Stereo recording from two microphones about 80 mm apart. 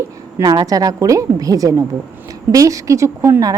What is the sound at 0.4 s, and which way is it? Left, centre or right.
A woman's voice, right.